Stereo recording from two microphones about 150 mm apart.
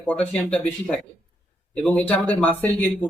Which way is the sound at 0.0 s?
10° left (ahead or behind).